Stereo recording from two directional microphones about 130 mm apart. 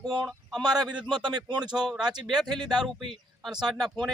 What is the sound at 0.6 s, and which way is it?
Speech, 30° right (ahead or behind).